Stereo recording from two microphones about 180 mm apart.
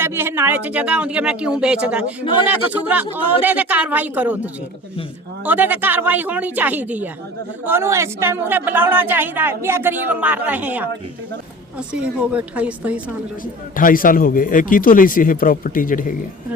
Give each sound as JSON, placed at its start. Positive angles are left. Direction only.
{"t": 0.0, "sound": "speech", "side_deg": -15}
{"t": 13.4, "sound": "a man's voice", "side_deg": 50}